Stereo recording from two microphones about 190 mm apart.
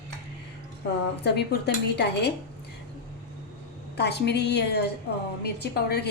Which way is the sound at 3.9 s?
60° left (ahead or behind).